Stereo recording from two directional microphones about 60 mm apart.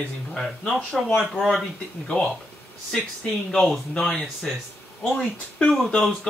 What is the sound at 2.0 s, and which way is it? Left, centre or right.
Speech, centre.